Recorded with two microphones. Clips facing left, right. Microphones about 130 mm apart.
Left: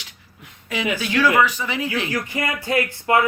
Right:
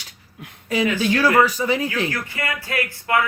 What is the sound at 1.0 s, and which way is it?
Speech, 40° right (ahead or behind).